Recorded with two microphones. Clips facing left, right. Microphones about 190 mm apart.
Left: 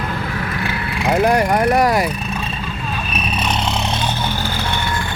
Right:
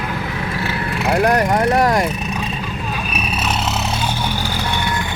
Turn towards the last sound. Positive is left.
turn(degrees=-15)  # may be behind; listen again after turning